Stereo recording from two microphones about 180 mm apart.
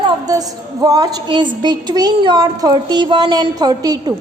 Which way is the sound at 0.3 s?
20° right (ahead or behind).